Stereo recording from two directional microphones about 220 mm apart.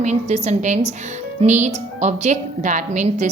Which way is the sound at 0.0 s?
30° right (ahead or behind).